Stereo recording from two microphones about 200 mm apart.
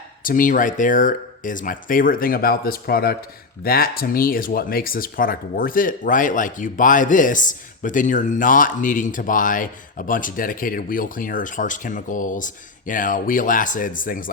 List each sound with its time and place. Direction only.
0.3 s speech: 40° left (ahead or behind)